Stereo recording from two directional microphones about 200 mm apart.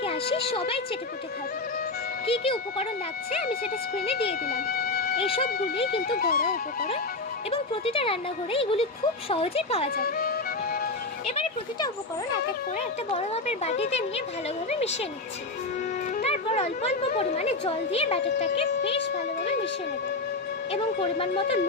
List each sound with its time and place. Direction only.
0.0 s a woman's voice: 30° left (ahead or behind)
2.2 s speech: 30° left (ahead or behind)
4.0 s speech: 30° left (ahead or behind)
4.4 s music: 50° left (ahead or behind)
5.9 s speech: 50° left (ahead or behind)
7.5 s speech: 30° left (ahead or behind)
10.0 s speech: 45° left (ahead or behind)
11.3 s speech: 30° left (ahead or behind)
13.1 s speech: 35° left (ahead or behind)
16.2 s speech: 30° left (ahead or behind)
20.7 s speech: 30° left (ahead or behind)